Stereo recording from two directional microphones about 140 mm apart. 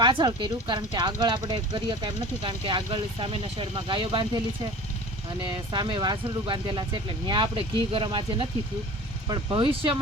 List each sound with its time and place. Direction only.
0.0 s speech: 30° right (ahead or behind)
5.7 s speech: 30° right (ahead or behind)